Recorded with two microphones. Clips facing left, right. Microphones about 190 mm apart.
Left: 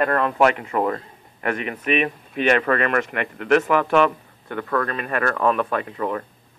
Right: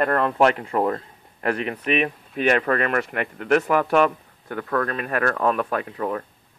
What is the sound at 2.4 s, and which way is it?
Speech, 40° right (ahead or behind).